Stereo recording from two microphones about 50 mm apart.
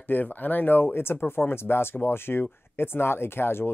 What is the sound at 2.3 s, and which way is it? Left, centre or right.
Speech, left.